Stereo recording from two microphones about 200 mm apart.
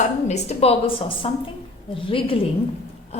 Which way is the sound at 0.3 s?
30° left (ahead or behind).